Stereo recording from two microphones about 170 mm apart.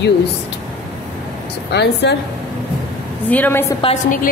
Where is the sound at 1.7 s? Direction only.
80° left.